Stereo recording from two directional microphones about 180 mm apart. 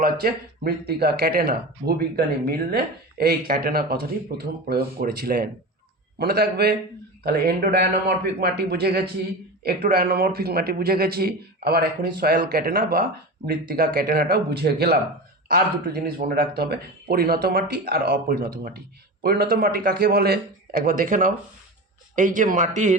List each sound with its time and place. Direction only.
0.0 s speech: 60° right (ahead or behind); by 23.0 s 40° right (ahead or behind)